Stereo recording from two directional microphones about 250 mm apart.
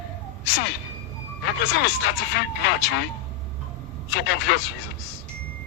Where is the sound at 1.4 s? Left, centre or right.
Left.